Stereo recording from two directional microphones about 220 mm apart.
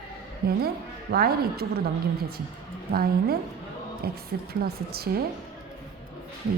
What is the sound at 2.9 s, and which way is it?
A woman's voice, 45° right (ahead or behind).